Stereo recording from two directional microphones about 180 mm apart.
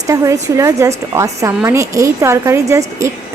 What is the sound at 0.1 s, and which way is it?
A woman's voice, 15° right (ahead or behind).